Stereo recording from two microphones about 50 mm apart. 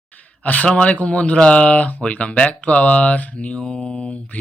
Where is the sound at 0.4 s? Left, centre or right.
Left.